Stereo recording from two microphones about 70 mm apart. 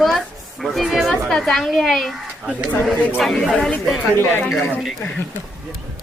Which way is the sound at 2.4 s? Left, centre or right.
Centre.